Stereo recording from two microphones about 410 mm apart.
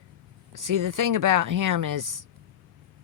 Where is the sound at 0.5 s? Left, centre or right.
Right.